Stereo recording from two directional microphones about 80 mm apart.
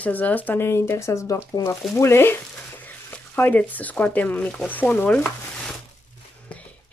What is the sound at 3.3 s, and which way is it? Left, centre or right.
Speech, left.